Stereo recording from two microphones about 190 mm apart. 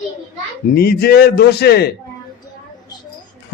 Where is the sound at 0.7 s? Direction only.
55° left (ahead or behind).